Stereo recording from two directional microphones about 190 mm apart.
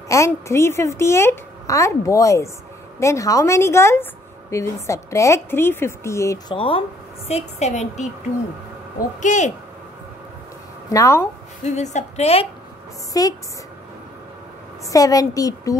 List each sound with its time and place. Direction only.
0.1 s a woman's voice: 15° left (ahead or behind)
6.5 s a woman's voice: 25° left (ahead or behind)
9.2 s a woman's voice: 40° left (ahead or behind)
10.9 s a woman's voice: 15° left (ahead or behind)
11.6 s a woman's voice: 40° left (ahead or behind)
13.1 s speech: 20° left (ahead or behind)
14.9 s a woman's voice: 20° left (ahead or behind)